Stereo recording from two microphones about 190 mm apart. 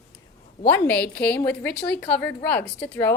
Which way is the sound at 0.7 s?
10° left (ahead or behind).